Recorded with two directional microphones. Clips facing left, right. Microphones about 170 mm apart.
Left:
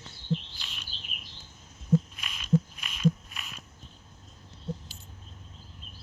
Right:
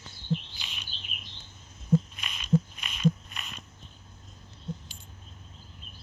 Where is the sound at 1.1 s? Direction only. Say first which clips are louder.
Right 1 dB; 5° left (ahead or behind).